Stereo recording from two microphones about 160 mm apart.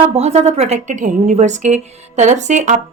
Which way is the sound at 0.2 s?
45° right (ahead or behind).